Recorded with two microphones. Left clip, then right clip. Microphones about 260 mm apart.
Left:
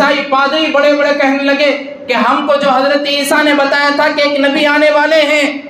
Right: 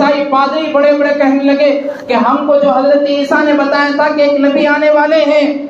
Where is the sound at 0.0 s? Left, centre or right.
Left.